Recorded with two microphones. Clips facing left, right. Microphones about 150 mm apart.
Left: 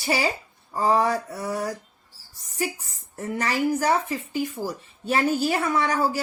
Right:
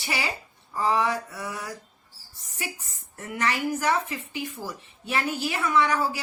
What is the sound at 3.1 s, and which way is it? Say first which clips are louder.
A woman's voice: left 2 dB; 35° left (ahead or behind).